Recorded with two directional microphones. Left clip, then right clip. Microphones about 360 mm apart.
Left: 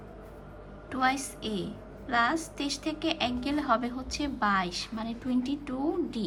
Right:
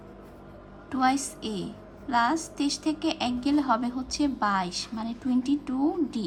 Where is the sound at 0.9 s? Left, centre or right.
Centre.